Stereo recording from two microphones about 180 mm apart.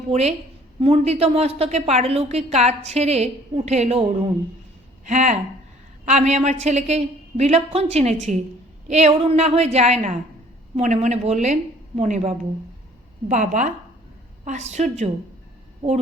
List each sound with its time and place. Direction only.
0.1 s a woman's voice: 35° right (ahead or behind)